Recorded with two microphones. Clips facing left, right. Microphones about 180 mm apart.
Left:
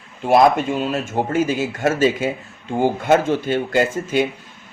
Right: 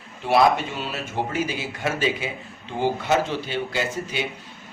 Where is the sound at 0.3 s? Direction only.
45° left (ahead or behind).